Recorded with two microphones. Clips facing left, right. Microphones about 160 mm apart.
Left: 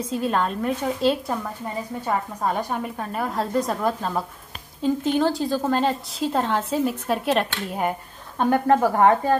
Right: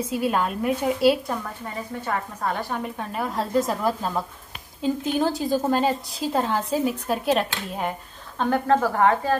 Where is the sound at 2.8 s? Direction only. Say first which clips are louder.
Left 1 dB; centre (ahead or behind); by 9.3 s 20° left (ahead or behind).